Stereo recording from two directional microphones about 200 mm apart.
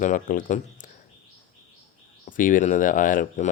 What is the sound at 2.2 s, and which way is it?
Speech, 40° left (ahead or behind).